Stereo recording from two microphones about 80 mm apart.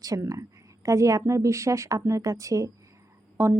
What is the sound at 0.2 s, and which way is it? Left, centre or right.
Speech, right.